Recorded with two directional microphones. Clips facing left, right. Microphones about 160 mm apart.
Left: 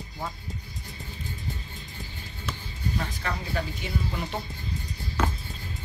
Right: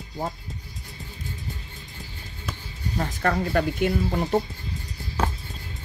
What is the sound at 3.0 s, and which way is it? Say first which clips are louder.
Speech: right 9 dB; 45° right (ahead or behind).